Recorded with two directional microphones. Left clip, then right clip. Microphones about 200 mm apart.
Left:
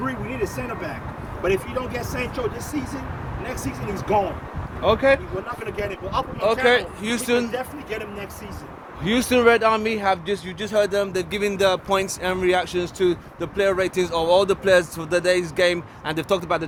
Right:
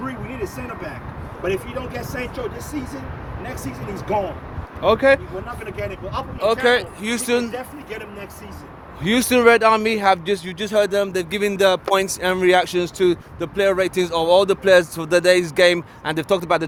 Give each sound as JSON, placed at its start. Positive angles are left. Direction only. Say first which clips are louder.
{"t": 0.0, "sound": "a sound", "louder": "left 2 dB", "side_deg": -10}
{"t": 1.5, "sound": "speech", "louder": "left 1 dB", "side_deg": -10}
{"t": 4.8, "sound": "speech", "louder": "right 3 dB", "side_deg": -45}
{"t": 5.7, "sound": "speech", "louder": "left 2 dB", "side_deg": -10}
{"t": 6.7, "sound": "speech", "louder": "right 1 dB", "side_deg": -35}
{"t": 7.5, "sound": "speech", "louder": "left 2 dB", "side_deg": -10}
{"t": 9.0, "sound": "speech", "louder": "right 3 dB", "side_deg": -35}
{"t": 16.1, "sound": "speech", "louder": "right 3 dB", "side_deg": -30}